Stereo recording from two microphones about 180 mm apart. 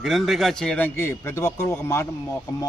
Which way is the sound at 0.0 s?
Centre (ahead or behind).